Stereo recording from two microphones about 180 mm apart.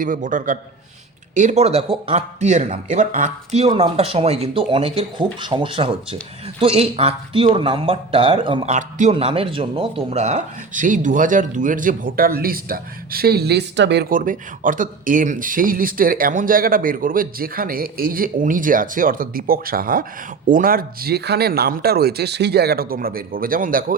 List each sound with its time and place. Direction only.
0.0 s speech: 45° right (ahead or behind); by 8.7 s 30° right (ahead or behind)
8.7 s speech: 40° right (ahead or behind); by 14.1 s 70° right (ahead or behind)
14.1 s speech: 50° right (ahead or behind)